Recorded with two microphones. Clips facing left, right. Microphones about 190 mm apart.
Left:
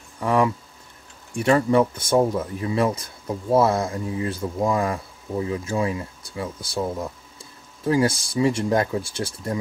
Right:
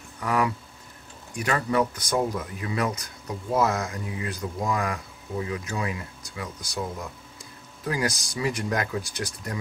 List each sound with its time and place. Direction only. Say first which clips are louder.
0.2 s speech: left 5 dB; 30° left (ahead or behind)